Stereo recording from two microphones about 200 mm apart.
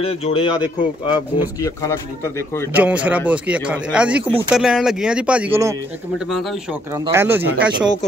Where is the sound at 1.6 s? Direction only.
15° left (ahead or behind).